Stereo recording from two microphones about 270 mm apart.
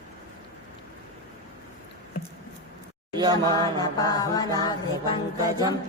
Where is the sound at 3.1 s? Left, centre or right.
Centre.